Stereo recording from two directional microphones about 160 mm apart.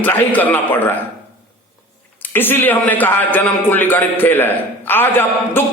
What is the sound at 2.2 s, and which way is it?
A man's voice, 10° left (ahead or behind).